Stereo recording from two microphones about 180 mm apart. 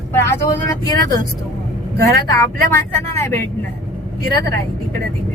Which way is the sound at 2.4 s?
15° left (ahead or behind).